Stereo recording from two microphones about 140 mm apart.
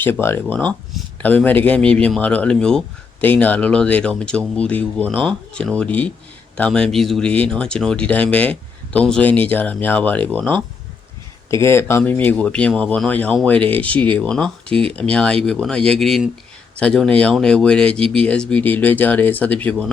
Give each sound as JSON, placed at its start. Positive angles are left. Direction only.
{"t": 0.0, "sound": "speech", "side_deg": 15}